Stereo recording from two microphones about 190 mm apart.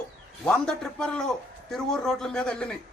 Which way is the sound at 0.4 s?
5° left (ahead or behind).